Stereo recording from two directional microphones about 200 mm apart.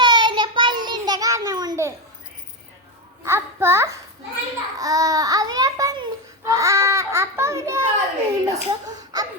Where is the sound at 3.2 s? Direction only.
15° right (ahead or behind).